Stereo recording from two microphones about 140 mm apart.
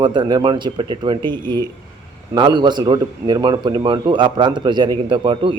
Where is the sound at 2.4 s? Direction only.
30° right (ahead or behind).